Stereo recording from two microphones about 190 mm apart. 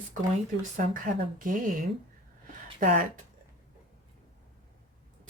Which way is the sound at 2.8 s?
45° right (ahead or behind).